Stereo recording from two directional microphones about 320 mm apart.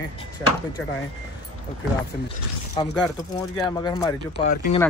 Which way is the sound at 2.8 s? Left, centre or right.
Centre.